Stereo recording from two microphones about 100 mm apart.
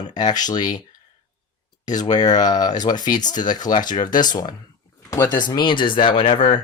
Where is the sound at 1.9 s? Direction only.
45° left (ahead or behind).